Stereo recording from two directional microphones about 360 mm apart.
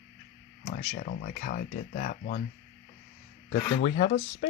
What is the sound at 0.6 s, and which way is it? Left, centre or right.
Speech, left.